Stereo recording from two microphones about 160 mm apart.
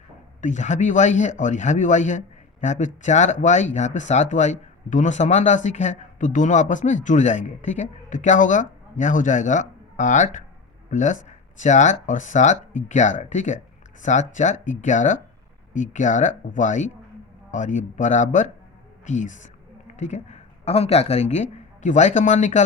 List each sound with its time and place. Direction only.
0.4 s a man's voice: 50° left (ahead or behind)